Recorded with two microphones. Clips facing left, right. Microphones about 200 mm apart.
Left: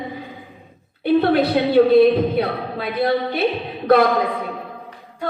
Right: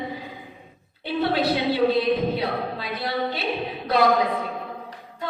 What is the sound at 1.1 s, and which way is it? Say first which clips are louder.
Speech: left 7 dB; 55° left (ahead or behind).